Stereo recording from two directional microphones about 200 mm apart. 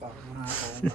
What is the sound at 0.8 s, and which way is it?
Speech, 10° left (ahead or behind).